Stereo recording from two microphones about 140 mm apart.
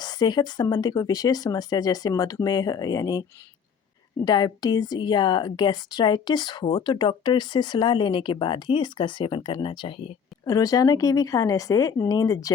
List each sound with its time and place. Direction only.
0.0 s speech: 30° left (ahead or behind)
4.3 s a woman's voice: 30° left (ahead or behind)
10.4 s speech: 25° left (ahead or behind)